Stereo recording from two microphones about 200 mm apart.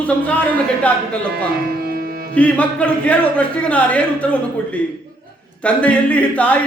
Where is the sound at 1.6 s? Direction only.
50° right (ahead or behind).